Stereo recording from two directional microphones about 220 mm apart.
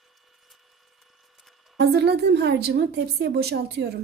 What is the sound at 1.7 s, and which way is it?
A woman's voice, 50° right (ahead or behind).